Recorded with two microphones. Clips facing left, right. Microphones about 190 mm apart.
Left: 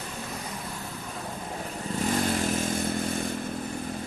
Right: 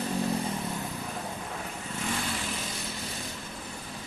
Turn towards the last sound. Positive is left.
turn(degrees=55)  # may be behind; listen again after turning